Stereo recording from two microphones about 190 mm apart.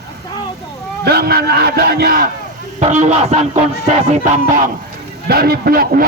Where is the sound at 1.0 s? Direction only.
55° right (ahead or behind).